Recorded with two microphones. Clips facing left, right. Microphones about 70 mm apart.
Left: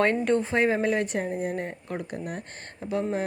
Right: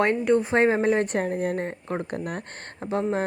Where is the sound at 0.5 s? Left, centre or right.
Right.